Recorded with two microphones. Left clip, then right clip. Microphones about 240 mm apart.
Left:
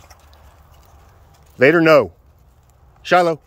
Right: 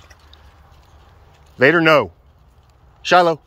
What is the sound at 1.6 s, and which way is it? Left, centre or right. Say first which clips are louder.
Speech: left 1 dB; centre.